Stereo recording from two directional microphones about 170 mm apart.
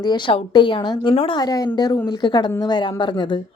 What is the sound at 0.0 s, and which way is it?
A woman's voice, 25° left (ahead or behind).